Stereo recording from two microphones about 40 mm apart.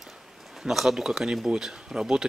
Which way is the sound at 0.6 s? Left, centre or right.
Centre.